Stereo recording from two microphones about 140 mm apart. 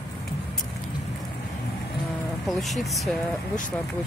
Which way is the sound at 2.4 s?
Centre (ahead or behind).